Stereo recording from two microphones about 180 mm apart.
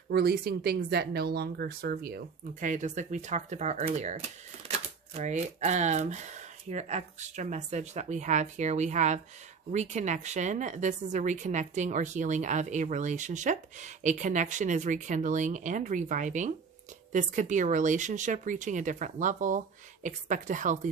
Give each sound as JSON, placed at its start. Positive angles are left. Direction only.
{"t": 0.1, "sound": "a woman's voice", "side_deg": -60}